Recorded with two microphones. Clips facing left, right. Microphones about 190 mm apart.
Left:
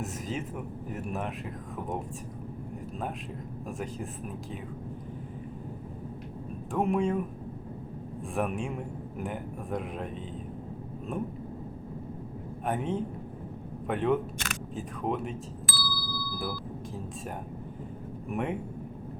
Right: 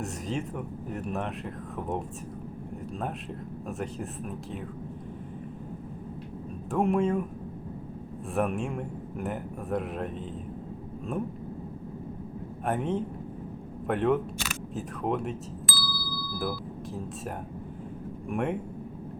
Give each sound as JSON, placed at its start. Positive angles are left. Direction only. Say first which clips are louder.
{"t": 0.0, "sound": "speech", "louder": "right 2 dB", "side_deg": 0}
{"t": 3.7, "sound": "speech", "louder": "right 2 dB", "side_deg": 0}
{"t": 6.7, "sound": "speech", "louder": "right 2 dB", "side_deg": 0}
{"t": 8.3, "sound": "speech", "louder": "right 3 dB", "side_deg": 0}
{"t": 12.6, "sound": "speech", "louder": "right 2 dB", "side_deg": 0}